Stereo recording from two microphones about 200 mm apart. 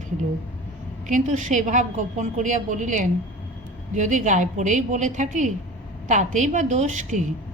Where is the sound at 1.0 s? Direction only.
35° right (ahead or behind).